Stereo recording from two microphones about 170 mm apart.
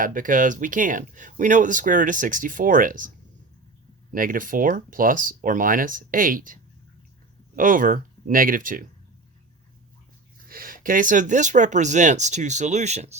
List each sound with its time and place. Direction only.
0.0 s speech: 50° right (ahead or behind)
4.1 s speech: 55° right (ahead or behind)
10.5 s speech: 55° right (ahead or behind); by 13.1 s 40° right (ahead or behind)